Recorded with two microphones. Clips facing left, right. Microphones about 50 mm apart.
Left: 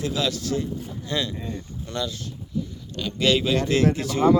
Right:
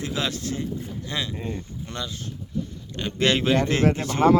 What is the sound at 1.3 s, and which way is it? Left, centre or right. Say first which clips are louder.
Speech: right 1 dB; right.